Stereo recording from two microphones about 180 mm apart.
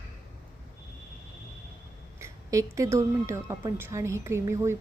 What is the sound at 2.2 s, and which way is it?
A woman's voice, 15° right (ahead or behind).